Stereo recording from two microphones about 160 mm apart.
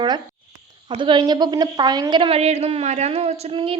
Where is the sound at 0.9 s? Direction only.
30° right (ahead or behind).